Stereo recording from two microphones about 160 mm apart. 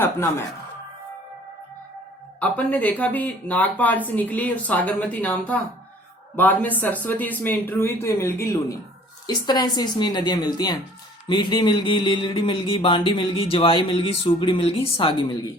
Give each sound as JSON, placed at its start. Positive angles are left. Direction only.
{"t": 0.0, "sound": "speech", "side_deg": 15}
{"t": 2.4, "sound": "speech", "side_deg": 10}
{"t": 11.3, "sound": "a sound", "side_deg": 25}